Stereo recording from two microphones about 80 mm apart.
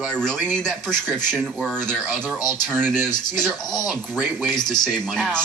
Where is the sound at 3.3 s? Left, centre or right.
Centre.